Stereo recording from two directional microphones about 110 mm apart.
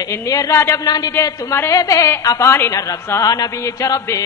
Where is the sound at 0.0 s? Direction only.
25° left (ahead or behind).